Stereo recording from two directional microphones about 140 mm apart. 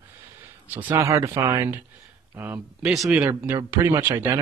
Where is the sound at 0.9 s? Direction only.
20° right (ahead or behind).